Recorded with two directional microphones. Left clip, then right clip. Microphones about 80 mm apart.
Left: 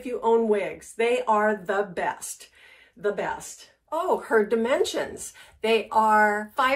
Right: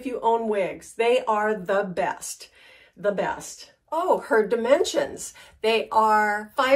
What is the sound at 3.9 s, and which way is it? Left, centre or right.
A woman's voice, right.